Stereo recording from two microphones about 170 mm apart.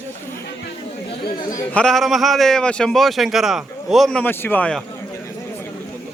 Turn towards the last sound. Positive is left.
turn(degrees=10)  # may be behind; listen again after turning